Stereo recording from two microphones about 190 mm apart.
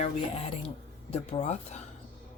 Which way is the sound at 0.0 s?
30° left (ahead or behind).